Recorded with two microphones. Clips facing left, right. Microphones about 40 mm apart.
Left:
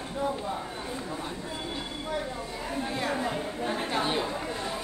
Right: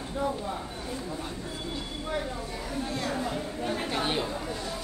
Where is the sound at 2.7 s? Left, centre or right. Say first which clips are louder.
Left 2 dB; left.